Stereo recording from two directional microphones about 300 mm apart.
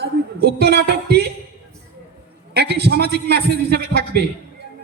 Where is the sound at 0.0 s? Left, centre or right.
Right.